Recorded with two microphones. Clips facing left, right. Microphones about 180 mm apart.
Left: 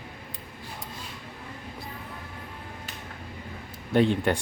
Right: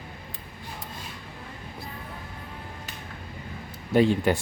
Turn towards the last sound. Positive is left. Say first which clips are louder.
# right 2 dB
turn(degrees=-5)  # may be behind; listen again after turning